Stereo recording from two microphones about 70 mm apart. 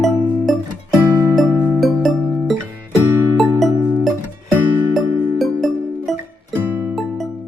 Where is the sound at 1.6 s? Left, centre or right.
Right.